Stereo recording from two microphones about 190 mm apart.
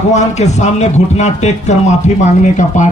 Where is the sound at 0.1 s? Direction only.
35° left (ahead or behind).